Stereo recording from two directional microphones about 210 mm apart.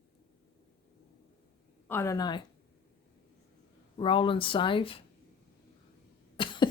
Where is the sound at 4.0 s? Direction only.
25° left (ahead or behind).